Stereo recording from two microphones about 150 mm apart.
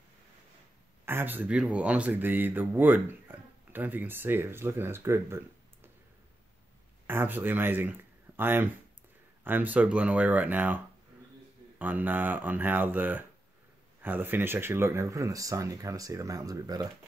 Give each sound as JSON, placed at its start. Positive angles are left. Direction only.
{"t": 1.0, "sound": "speech", "side_deg": -15}
{"t": 7.1, "sound": "speech", "side_deg": -15}
{"t": 11.8, "sound": "speech", "side_deg": -10}